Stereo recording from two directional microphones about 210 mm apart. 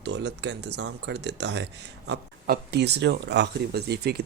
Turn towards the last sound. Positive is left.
turn(degrees=-50)  # may be behind; listen again after turning